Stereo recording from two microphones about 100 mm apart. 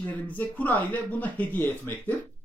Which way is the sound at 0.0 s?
15° left (ahead or behind).